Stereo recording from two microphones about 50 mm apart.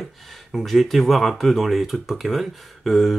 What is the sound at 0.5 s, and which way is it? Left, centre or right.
Speech, centre.